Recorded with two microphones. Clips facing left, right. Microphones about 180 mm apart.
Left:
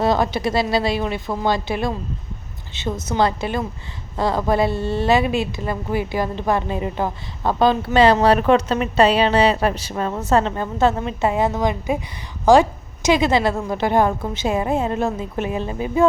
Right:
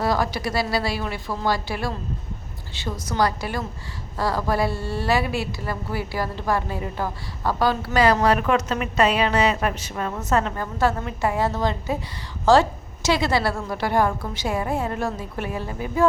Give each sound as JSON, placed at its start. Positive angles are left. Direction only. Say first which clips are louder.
{"t": 0.0, "sound": "a woman's voice", "louder": "left 4 dB", "side_deg": 20}